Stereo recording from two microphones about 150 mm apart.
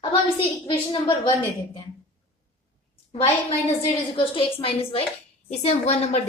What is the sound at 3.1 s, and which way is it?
A woman's voice, 45° left (ahead or behind).